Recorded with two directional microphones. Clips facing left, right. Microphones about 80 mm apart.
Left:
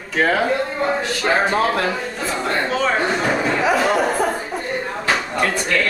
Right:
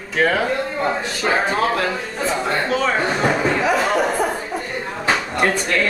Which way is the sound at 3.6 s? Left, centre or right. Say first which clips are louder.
Left 3 dB; centre.